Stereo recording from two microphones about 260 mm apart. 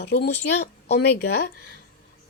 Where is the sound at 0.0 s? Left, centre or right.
Left.